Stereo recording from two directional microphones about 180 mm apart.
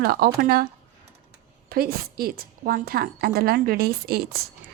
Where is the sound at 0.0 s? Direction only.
55° right (ahead or behind).